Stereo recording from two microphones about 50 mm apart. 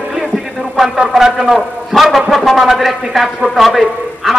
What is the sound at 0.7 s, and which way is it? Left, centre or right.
A man's voice, centre.